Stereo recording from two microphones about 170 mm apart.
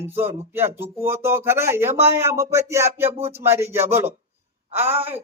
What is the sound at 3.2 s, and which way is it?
Speech, 35° right (ahead or behind).